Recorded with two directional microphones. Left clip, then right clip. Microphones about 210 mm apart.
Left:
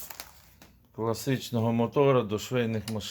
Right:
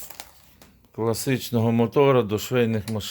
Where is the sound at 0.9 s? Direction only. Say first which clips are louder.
Right 5 dB; 50° right (ahead or behind).